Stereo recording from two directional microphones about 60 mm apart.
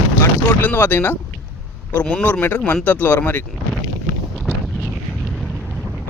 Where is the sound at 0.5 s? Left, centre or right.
Left.